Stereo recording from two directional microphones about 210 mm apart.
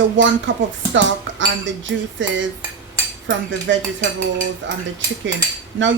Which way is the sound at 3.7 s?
60° right (ahead or behind).